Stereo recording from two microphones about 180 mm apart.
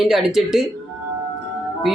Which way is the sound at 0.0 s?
5° right (ahead or behind).